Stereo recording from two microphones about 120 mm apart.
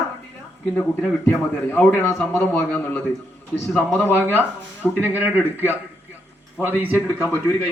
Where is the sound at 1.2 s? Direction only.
20° left (ahead or behind).